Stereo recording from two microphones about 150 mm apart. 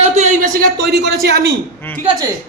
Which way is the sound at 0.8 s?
90° right.